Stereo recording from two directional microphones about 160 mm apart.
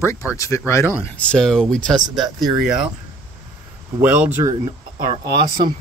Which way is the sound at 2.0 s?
25° right (ahead or behind).